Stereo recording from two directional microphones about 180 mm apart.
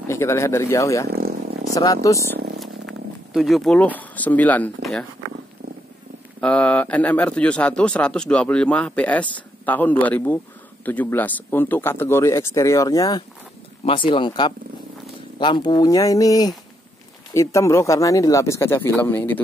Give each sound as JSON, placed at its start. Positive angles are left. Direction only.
{"t": 0.1, "sound": "speech", "side_deg": 15}
{"t": 1.0, "sound": "a sound", "side_deg": -60}
{"t": 1.7, "sound": "speech", "side_deg": 20}
{"t": 2.6, "sound": "speech", "side_deg": 0}
{"t": 6.4, "sound": "speech", "side_deg": 5}